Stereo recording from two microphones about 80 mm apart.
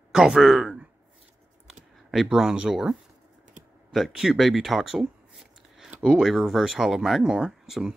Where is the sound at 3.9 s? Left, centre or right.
Centre.